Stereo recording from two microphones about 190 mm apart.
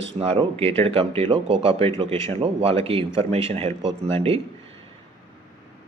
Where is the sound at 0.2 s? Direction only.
30° right (ahead or behind).